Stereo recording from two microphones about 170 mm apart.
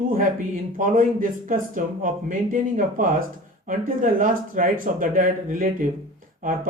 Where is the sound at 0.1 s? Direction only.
55° right (ahead or behind).